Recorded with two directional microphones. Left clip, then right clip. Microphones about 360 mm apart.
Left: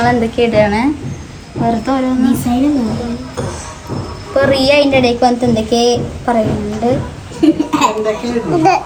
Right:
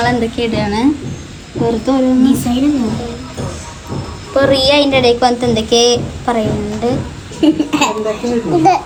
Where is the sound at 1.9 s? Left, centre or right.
Centre.